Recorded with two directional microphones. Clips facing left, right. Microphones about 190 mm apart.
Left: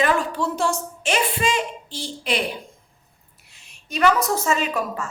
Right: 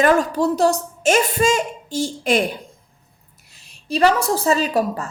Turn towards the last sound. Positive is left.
turn(degrees=-35)  # may be behind; listen again after turning